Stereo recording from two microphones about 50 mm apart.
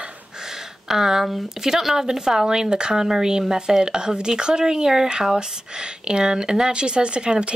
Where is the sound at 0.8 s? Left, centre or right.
Centre.